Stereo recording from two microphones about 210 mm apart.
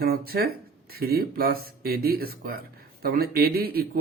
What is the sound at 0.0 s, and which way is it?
Speech, 45° right (ahead or behind).